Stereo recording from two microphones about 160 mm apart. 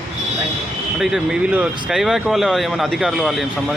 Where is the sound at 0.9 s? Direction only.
5° right (ahead or behind).